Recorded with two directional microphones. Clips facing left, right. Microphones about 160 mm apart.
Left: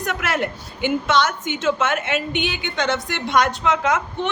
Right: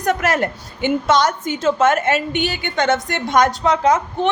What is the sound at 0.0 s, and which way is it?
Speech, 40° right (ahead or behind).